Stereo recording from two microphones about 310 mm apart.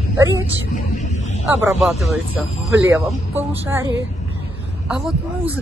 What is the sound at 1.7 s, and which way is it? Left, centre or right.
Speech, centre.